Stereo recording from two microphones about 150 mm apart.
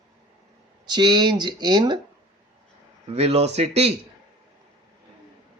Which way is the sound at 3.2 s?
45° right (ahead or behind).